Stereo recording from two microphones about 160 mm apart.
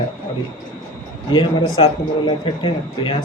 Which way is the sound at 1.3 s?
30° left (ahead or behind).